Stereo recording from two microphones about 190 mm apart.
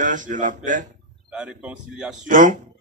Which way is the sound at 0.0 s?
45° right (ahead or behind).